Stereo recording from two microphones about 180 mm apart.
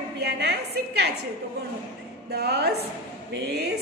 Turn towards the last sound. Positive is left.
turn(degrees=-65)  # may be behind; listen again after turning